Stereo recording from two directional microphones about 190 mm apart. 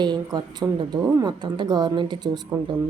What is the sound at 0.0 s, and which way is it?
Speech, 20° right (ahead or behind).